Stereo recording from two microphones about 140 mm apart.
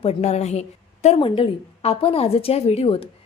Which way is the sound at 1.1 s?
40° left (ahead or behind).